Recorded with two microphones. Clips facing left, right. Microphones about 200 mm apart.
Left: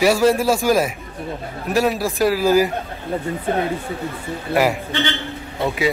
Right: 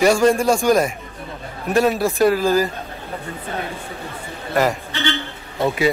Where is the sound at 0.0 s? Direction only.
5° left (ahead or behind).